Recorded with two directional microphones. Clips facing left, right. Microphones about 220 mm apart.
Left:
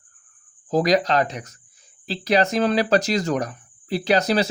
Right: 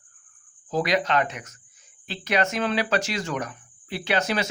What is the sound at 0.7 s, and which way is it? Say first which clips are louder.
Speech: left 5 dB; 40° left (ahead or behind).